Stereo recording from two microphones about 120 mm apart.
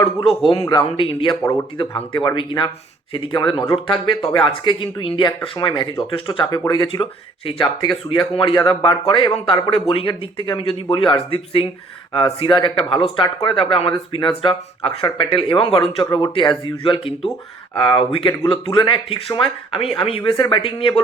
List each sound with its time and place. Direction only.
0.5 s speech: 45° left (ahead or behind)
20.3 s speech: 40° left (ahead or behind)
20.6 s speech: 50° left (ahead or behind)